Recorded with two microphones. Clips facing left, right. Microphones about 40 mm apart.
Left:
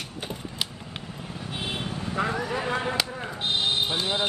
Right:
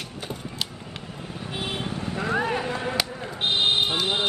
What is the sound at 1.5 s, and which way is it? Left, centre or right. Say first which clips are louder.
Vehicle: right 2 dB; right.